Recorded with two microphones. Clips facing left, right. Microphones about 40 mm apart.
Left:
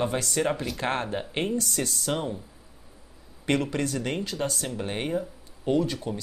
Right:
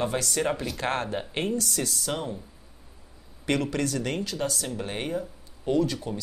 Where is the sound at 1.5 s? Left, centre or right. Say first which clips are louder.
Even; left.